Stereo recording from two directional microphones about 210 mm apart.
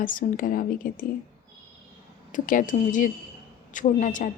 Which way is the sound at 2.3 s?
40° left (ahead or behind).